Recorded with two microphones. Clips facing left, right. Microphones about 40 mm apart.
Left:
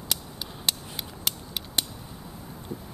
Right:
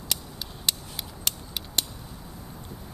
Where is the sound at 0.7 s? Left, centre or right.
Centre.